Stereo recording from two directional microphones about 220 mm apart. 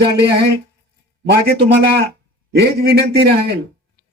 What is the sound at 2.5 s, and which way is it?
Speech, 45° right (ahead or behind).